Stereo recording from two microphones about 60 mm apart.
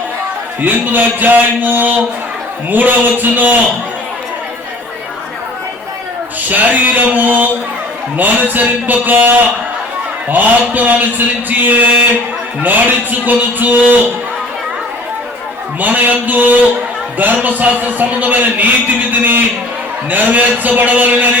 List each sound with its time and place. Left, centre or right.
0.6 s a man's voice: right
6.5 s a man's voice: right
15.8 s a man's voice: right